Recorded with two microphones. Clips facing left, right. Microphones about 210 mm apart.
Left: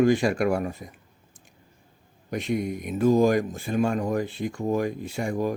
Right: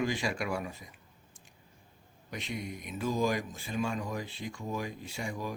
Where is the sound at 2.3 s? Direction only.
50° left (ahead or behind).